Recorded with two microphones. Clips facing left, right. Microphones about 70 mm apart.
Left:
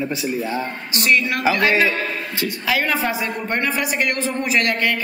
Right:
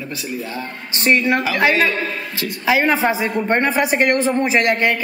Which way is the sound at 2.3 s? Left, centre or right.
Centre.